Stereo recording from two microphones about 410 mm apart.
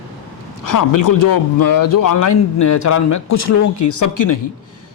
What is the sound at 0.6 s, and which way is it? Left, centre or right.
A man's voice, left.